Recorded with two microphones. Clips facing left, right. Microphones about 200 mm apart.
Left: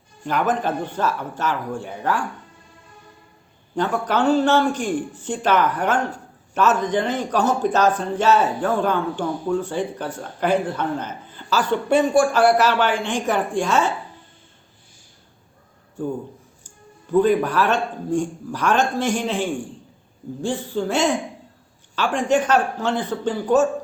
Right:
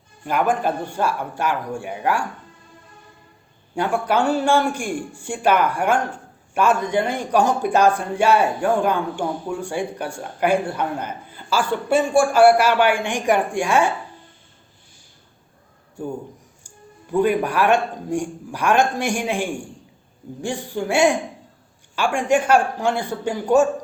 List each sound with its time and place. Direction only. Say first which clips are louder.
0.3 s a man's voice: right 1 dB; 10° right (ahead or behind)
3.8 s a man's voice: right 1 dB; 10° right (ahead or behind)
16.6 s a man's voice: left 1 dB; 15° right (ahead or behind)